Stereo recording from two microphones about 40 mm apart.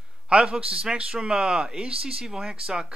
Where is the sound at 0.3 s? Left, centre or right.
Right.